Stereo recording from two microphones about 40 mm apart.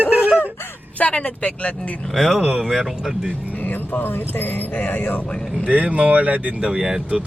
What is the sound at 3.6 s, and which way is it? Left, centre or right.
Music, left.